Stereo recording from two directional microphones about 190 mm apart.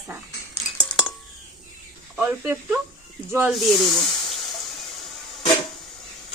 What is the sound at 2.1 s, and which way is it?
Speech, 10° right (ahead or behind).